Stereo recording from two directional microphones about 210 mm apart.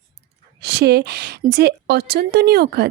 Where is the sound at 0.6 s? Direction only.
50° right (ahead or behind).